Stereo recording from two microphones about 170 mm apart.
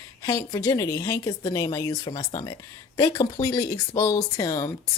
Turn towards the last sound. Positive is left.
turn(degrees=20)  # may be behind; listen again after turning